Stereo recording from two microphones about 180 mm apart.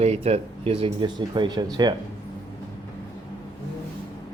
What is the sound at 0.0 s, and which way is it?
Speech, 35° right (ahead or behind).